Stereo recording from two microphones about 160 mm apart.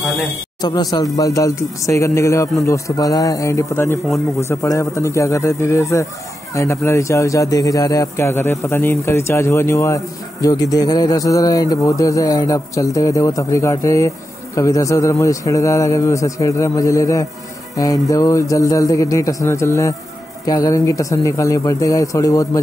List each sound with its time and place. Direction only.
0.6 s a man's voice: 25° left (ahead or behind)